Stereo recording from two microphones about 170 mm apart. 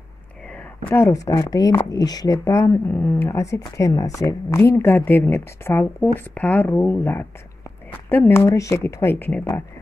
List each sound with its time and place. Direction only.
0.8 s a woman's voice: 15° left (ahead or behind)